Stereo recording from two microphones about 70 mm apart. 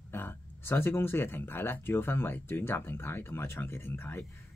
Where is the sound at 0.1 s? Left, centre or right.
Left.